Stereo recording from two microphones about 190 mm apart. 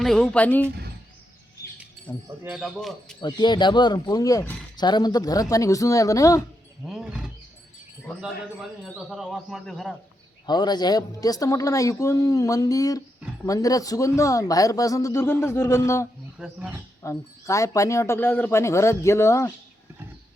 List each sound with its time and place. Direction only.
0.0 s speech: 5° left (ahead or behind)
2.2 s speech: 10° right (ahead or behind)
2.6 s speech: centre (ahead or behind)
3.2 s speech: 25° left (ahead or behind)
6.8 s speech: centre (ahead or behind)
8.8 s speech: centre (ahead or behind)
10.4 s speech: 20° left (ahead or behind)
16.4 s speech: 5° right (ahead or behind)
17.0 s speech: 15° left (ahead or behind)